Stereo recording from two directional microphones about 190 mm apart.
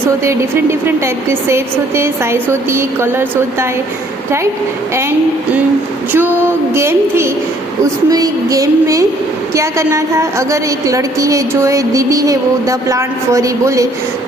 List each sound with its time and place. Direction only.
0.3 s a woman's voice: 15° right (ahead or behind)
6.1 s a woman's voice: 10° right (ahead or behind)